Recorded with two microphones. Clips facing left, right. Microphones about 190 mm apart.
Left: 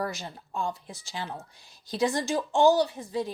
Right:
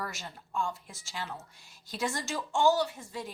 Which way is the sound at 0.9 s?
35° left (ahead or behind).